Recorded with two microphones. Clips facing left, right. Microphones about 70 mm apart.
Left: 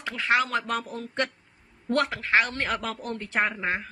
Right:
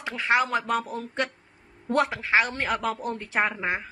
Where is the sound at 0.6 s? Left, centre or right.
Centre.